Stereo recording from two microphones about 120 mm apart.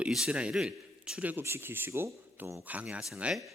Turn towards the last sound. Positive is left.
turn(degrees=-5)  # may be behind; listen again after turning